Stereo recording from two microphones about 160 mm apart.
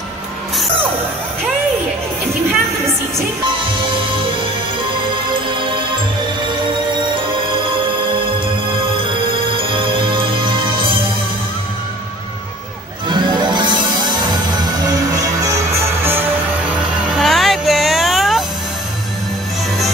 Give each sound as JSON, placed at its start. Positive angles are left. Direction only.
{"t": 9.5, "sound": "music", "side_deg": -35}
{"t": 13.1, "sound": "music", "side_deg": -30}
{"t": 17.2, "sound": "a sound", "side_deg": 0}